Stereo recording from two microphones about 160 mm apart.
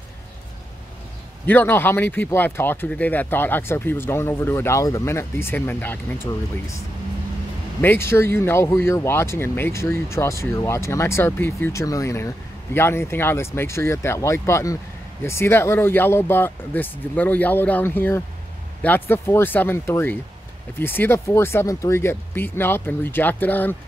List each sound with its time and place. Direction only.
1.4 s speech: 10° left (ahead or behind)
7.8 s speech: 15° left (ahead or behind)